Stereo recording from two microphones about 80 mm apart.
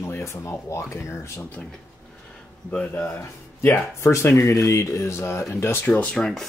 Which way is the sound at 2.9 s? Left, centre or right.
Left.